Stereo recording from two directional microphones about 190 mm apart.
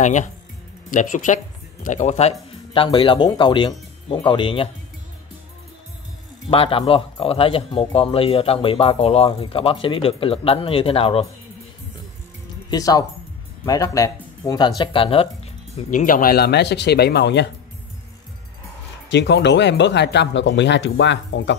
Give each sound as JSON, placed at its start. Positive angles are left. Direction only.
{"t": 0.0, "sound": "speech", "side_deg": 40}
{"t": 6.5, "sound": "speech", "side_deg": 30}
{"t": 12.6, "sound": "speech", "side_deg": 20}
{"t": 19.0, "sound": "speech", "side_deg": 65}